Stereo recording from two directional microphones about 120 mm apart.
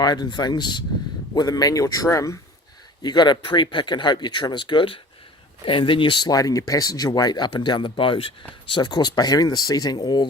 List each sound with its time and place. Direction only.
0.0 s speech: 35° left (ahead or behind)
3.0 s speech: 40° left (ahead or behind)